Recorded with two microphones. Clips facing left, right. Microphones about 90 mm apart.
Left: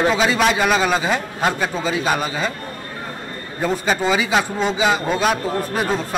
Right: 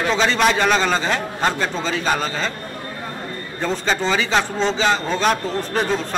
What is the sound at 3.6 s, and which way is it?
A man's voice, 10° left (ahead or behind).